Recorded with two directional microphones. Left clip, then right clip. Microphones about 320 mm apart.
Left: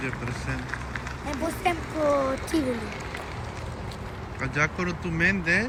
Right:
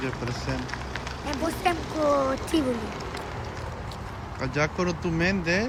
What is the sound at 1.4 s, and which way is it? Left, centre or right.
Speech, centre.